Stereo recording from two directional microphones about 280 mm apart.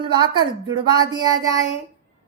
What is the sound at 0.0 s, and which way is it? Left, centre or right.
A woman's voice, centre.